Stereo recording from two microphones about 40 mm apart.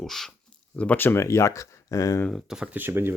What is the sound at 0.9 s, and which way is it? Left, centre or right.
Speech, left.